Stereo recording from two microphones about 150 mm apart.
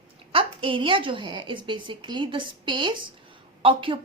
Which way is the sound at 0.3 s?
35° right (ahead or behind).